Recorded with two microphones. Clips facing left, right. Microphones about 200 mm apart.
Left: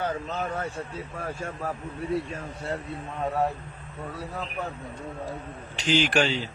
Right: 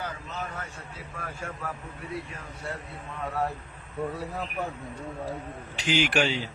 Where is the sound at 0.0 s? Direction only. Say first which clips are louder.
Left 6 dB; 30° left (ahead or behind).